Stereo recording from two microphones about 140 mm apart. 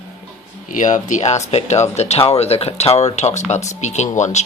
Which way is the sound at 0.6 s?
70° left (ahead or behind).